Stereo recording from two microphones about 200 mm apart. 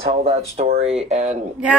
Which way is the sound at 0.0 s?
30° right (ahead or behind).